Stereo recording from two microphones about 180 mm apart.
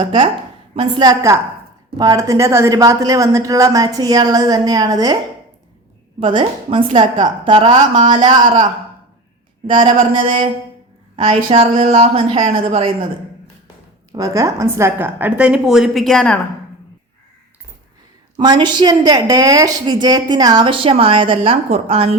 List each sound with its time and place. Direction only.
0.0 s a woman's voice: 25° right (ahead or behind)
6.1 s a woman's voice: 30° right (ahead or behind)
14.1 s a woman's voice: 20° right (ahead or behind); by 16.4 s 5° left (ahead or behind)
18.3 s a woman's voice: 25° right (ahead or behind)